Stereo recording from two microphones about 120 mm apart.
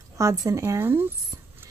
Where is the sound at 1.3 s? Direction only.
30° right (ahead or behind).